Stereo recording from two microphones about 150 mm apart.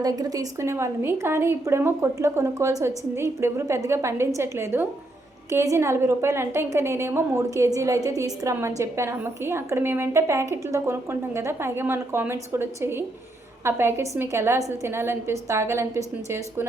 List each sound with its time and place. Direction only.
0.0 s a woman's voice: 25° right (ahead or behind)